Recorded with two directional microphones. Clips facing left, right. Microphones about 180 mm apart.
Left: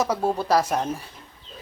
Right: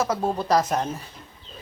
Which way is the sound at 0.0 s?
10° left (ahead or behind).